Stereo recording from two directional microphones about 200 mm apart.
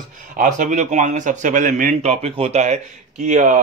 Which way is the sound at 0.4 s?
40° right (ahead or behind).